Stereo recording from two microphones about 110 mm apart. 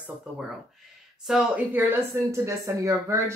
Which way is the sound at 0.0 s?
5° right (ahead or behind).